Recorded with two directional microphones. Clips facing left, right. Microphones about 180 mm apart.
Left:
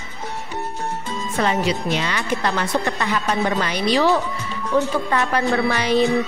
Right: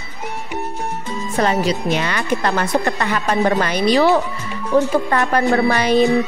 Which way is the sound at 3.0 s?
60° right (ahead or behind).